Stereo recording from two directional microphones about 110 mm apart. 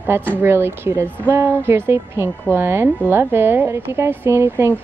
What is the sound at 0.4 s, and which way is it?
A woman's voice, 20° right (ahead or behind).